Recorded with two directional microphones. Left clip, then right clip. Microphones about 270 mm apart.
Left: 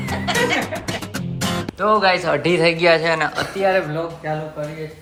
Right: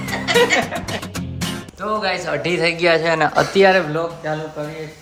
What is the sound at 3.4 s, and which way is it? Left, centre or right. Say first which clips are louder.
Speech: right 5 dB; right.